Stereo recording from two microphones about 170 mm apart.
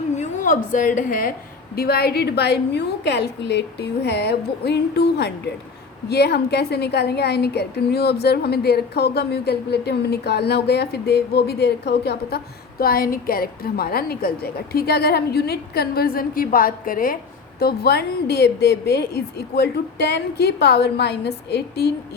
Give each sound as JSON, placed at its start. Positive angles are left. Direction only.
{"t": 0.2, "sound": "a woman's voice", "side_deg": 50}
{"t": 1.7, "sound": "a woman's voice", "side_deg": 65}
{"t": 12.8, "sound": "a woman's voice", "side_deg": 60}
{"t": 17.6, "sound": "a woman's voice", "side_deg": 70}